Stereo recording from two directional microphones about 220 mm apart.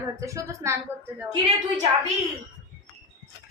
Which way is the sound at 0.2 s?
15° right (ahead or behind).